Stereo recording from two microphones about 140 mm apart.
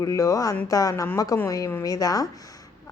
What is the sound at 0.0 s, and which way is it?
Speech, 20° left (ahead or behind).